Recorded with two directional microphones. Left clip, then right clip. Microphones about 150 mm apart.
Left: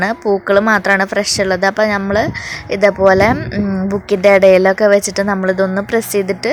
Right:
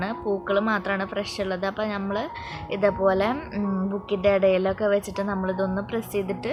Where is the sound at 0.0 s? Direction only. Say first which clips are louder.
Left 12 dB; 60° left (ahead or behind).